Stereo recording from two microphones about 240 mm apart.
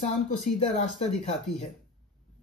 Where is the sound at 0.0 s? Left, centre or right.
Left.